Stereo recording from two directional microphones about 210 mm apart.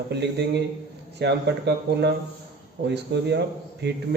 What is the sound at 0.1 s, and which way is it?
A man's voice, 55° right (ahead or behind).